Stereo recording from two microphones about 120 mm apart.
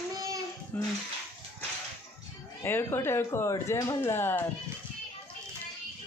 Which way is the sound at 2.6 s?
20° left (ahead or behind).